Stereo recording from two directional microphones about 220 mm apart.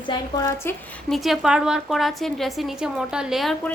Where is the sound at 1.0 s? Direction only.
Centre (ahead or behind).